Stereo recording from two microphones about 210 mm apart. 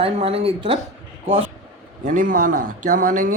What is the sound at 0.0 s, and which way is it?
Speech, 25° right (ahead or behind).